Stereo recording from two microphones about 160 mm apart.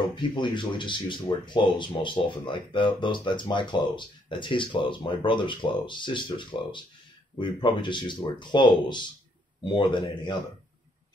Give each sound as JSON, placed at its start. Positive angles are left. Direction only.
{"t": 0.1, "sound": "speech", "side_deg": 30}